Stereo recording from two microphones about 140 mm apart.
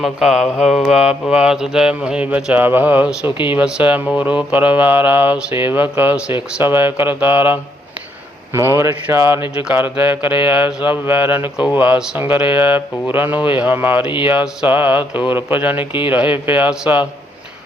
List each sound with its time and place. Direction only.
0.0 s speech: 5° right (ahead or behind)
3.2 s speech: 35° left (ahead or behind)
3.5 s speech: 10° right (ahead or behind)